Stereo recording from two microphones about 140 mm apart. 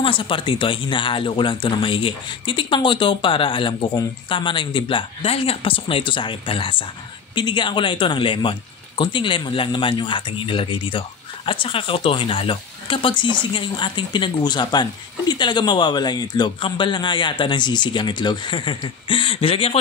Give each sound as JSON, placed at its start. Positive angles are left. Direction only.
{"t": 0.0, "sound": "speech", "side_deg": 40}